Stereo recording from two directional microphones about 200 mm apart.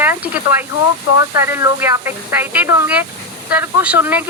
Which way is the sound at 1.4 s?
10° right (ahead or behind).